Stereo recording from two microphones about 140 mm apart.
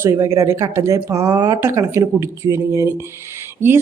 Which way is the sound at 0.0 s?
20° right (ahead or behind).